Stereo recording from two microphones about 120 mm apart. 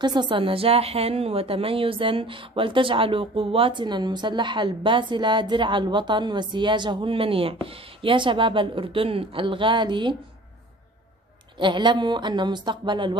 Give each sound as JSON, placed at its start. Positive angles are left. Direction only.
{"t": 0.0, "sound": "a woman's voice", "side_deg": -40}
{"t": 11.5, "sound": "speech", "side_deg": -40}